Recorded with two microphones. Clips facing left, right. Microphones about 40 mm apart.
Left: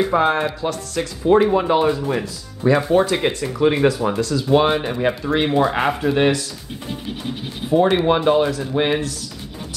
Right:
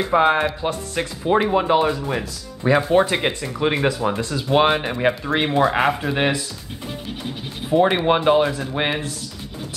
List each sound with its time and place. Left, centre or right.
0.1 s speech: centre
1.3 s speech: centre
2.9 s speech: right
3.2 s speech: centre
4.2 s speech: right
6.9 s speech: centre
7.7 s speech: centre